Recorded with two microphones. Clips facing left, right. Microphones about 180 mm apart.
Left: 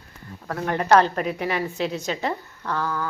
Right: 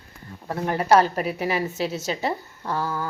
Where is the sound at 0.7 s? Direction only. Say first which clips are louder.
Even; 10° right (ahead or behind).